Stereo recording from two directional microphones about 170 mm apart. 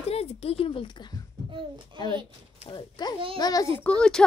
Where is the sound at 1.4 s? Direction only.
30° right (ahead or behind).